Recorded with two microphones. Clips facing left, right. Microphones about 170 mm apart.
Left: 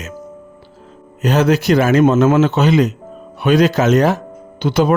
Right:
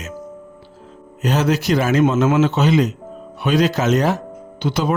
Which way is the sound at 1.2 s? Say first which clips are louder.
Left 4 dB; 60° left (ahead or behind).